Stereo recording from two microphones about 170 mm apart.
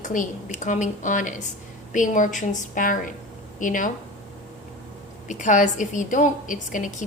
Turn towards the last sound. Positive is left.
turn(degrees=50)  # may be behind; listen again after turning